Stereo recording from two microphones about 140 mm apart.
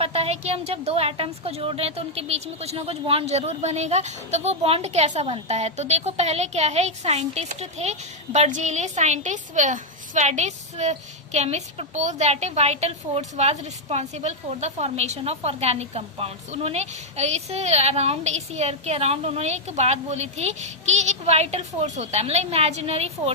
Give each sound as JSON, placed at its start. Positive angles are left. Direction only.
{"t": 0.0, "sound": "a woman's voice", "side_deg": -45}